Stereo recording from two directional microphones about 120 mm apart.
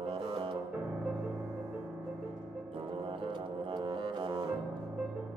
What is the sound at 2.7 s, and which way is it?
Music, 50° right (ahead or behind).